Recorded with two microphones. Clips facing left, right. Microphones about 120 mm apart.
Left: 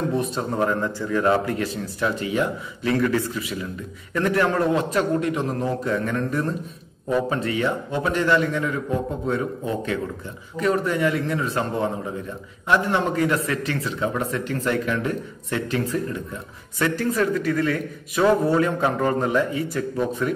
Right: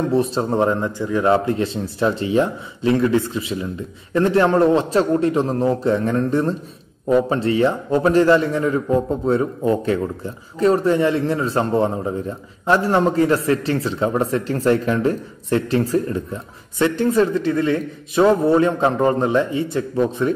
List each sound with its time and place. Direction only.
0.1 s a man's voice: 30° right (ahead or behind)